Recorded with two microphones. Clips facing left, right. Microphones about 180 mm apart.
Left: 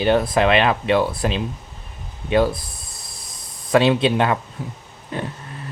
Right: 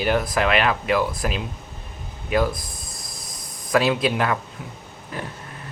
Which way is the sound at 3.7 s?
25° left (ahead or behind).